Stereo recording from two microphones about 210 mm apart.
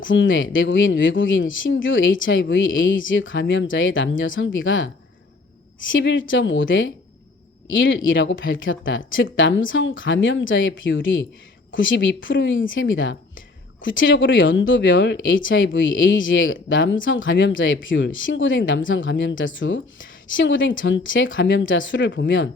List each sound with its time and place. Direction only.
0.0 s speech: 65° left (ahead or behind)